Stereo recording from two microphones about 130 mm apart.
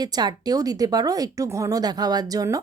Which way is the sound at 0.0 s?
30° right (ahead or behind).